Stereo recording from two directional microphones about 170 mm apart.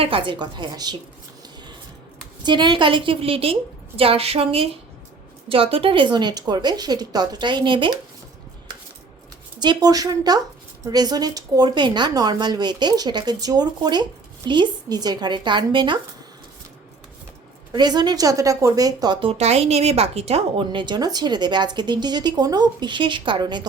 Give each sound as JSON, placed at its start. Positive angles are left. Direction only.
{"t": 0.0, "sound": "speech", "side_deg": -30}
{"t": 2.4, "sound": "a woman's voice", "side_deg": -25}
{"t": 9.6, "sound": "speech", "side_deg": -25}
{"t": 17.7, "sound": "speech", "side_deg": -25}